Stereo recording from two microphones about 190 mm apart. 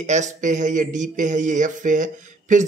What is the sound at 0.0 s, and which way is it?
Speech, 40° right (ahead or behind).